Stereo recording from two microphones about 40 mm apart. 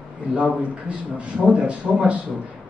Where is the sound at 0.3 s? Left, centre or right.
Right.